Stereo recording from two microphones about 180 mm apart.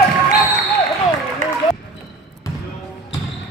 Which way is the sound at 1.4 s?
45° right (ahead or behind).